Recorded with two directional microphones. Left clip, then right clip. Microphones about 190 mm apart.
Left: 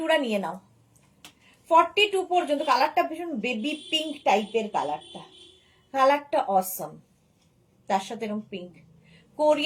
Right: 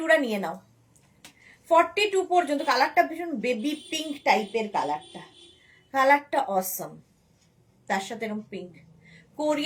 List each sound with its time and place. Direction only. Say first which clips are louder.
0.0 s a woman's voice: right 1 dB; 15° right (ahead or behind)
1.6 s a woman's voice: left 1 dB; 15° right (ahead or behind)
7.9 s a woman's voice: left 2 dB; 15° right (ahead or behind)